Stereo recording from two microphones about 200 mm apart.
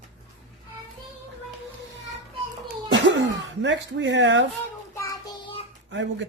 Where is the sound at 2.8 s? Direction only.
65° right (ahead or behind).